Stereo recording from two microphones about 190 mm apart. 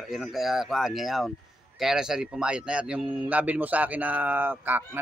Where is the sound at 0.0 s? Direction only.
Centre (ahead or behind).